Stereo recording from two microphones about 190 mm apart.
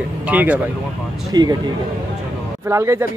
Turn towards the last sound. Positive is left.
turn(degrees=-15)  # may be behind; listen again after turning